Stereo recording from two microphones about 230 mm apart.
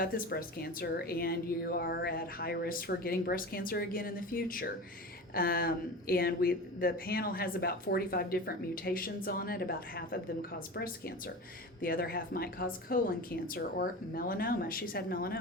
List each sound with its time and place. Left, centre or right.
0.0 s speech: left